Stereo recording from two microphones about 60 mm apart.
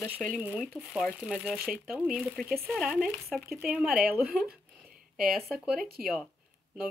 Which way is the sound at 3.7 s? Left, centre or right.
Centre.